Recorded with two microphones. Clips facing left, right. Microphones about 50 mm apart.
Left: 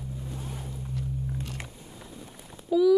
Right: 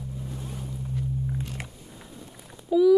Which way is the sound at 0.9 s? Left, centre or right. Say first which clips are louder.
Right 3 dB; centre.